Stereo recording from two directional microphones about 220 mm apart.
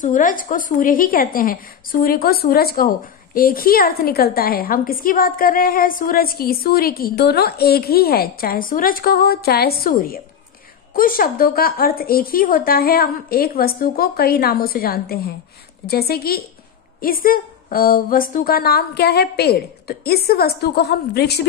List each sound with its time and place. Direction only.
0.0 s a woman's voice: 35° left (ahead or behind)